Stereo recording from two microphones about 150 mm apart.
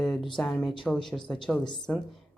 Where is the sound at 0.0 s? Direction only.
Centre (ahead or behind).